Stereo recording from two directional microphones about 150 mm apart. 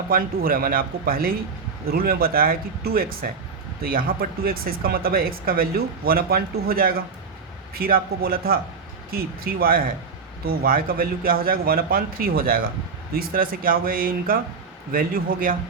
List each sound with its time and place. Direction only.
0.1 s speech: 75° right (ahead or behind)